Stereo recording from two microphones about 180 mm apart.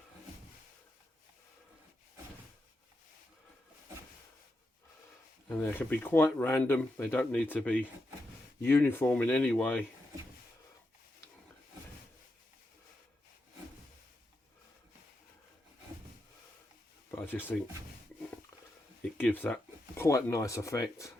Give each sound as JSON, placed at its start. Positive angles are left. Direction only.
{"t": 5.5, "sound": "speech", "side_deg": 10}
{"t": 17.1, "sound": "a sound", "side_deg": 10}
{"t": 19.0, "sound": "speech", "side_deg": 10}